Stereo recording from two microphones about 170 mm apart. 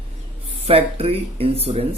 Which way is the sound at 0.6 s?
35° right (ahead or behind).